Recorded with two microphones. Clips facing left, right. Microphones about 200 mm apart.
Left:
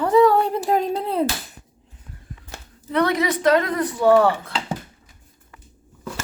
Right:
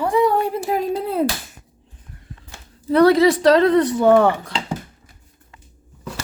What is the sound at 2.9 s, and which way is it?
A woman's voice, 35° right (ahead or behind).